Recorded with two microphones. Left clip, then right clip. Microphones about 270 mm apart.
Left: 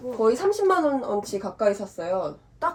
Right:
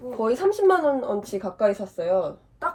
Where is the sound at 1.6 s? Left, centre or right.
Centre.